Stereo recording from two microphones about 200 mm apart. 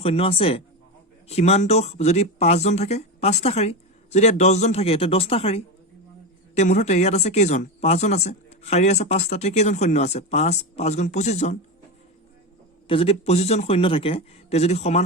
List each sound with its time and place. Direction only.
0.0 s speech: 30° left (ahead or behind)
12.9 s speech: 30° left (ahead or behind)